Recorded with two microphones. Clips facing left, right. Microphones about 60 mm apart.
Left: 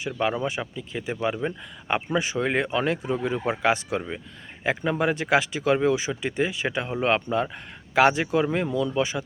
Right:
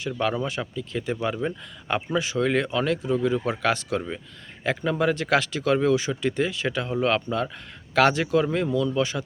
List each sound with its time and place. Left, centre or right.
0.2 s speech: left
2.0 s speech: left